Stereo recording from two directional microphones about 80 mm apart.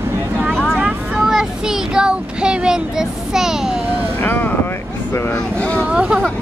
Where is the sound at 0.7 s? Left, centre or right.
Centre.